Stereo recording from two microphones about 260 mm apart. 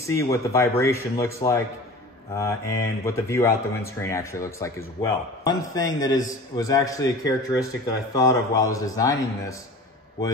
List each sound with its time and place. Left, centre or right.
0.0 s speech: centre